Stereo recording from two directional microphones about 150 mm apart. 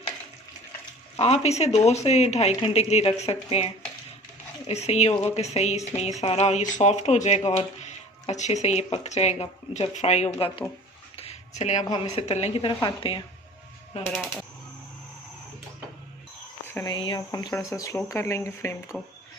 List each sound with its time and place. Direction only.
1.2 s a woman's voice: 45° left (ahead or behind)
11.2 s a sound: 45° left (ahead or behind)
12.0 s a woman's voice: 45° left (ahead or behind)
16.8 s speech: 30° left (ahead or behind)